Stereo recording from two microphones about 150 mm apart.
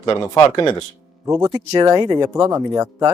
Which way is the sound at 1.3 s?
25° right (ahead or behind).